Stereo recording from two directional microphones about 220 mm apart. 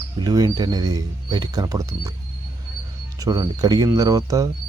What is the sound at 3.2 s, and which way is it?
Speech, 15° right (ahead or behind).